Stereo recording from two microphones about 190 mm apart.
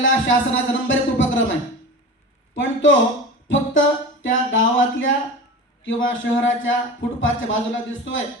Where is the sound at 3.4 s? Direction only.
80° left.